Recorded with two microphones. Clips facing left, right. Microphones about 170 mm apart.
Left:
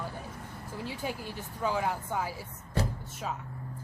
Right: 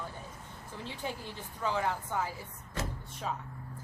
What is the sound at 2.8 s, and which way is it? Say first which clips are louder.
Door: left 6 dB; 35° left (ahead or behind).